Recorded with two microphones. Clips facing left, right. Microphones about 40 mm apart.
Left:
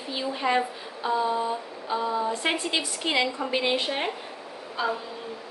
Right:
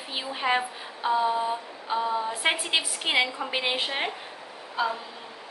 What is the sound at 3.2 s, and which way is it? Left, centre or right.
A woman's voice, centre.